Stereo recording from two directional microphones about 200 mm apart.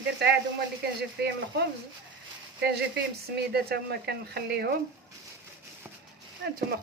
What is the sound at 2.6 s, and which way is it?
Speech, 55° right (ahead or behind).